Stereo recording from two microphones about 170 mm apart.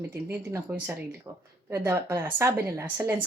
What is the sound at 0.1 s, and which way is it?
Speech, 15° right (ahead or behind).